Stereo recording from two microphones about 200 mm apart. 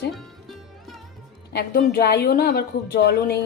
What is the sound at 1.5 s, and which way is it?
A woman's voice, 50° left (ahead or behind).